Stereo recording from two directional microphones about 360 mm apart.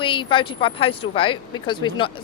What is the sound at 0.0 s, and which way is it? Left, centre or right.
Speech, centre.